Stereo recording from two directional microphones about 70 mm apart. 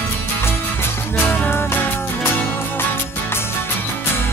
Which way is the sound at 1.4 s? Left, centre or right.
Left.